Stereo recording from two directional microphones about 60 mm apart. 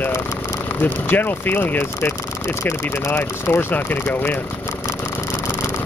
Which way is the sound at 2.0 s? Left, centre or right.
Left.